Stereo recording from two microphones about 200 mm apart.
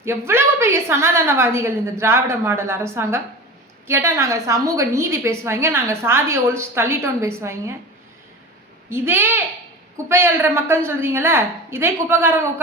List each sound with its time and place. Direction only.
0.0 s a woman's voice: 10° right (ahead or behind)
8.9 s a woman's voice: 10° right (ahead or behind)